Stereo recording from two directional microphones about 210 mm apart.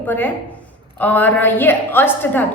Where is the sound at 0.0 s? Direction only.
10° left (ahead or behind).